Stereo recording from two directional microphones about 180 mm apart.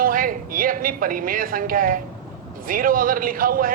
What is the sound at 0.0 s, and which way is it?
A man's voice, 50° right (ahead or behind).